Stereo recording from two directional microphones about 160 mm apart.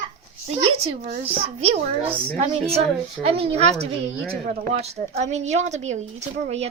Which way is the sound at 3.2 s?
40° right (ahead or behind).